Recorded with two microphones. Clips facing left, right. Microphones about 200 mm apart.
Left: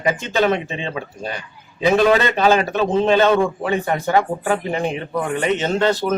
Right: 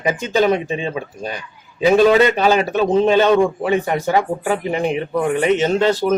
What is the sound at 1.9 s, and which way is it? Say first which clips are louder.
A man's voice: right 4 dB; 10° right (ahead or behind).